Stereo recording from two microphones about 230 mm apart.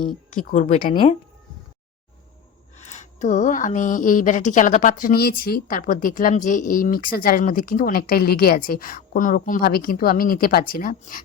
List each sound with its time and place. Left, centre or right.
0.5 s a woman's voice: left
2.7 s a woman's voice: left